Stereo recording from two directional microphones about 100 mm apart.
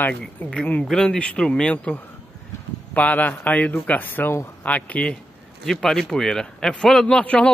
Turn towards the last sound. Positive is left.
turn(degrees=10)  # may be behind; listen again after turning